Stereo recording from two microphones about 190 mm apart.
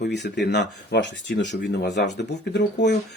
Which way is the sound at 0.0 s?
60° left (ahead or behind).